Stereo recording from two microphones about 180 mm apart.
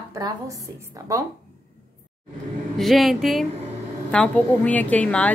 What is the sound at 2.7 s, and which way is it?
A woman's voice, centre (ahead or behind).